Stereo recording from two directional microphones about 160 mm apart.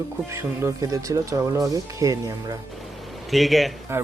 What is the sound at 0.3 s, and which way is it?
Speech, 15° right (ahead or behind).